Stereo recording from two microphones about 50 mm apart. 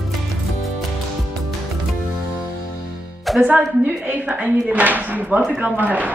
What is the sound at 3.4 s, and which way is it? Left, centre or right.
A woman's voice, right.